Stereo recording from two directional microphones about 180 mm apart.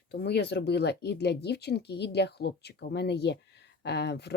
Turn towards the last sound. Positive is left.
turn(degrees=70)  # may be behind; listen again after turning